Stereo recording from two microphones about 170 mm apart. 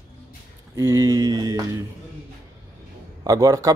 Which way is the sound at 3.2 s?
20° right (ahead or behind).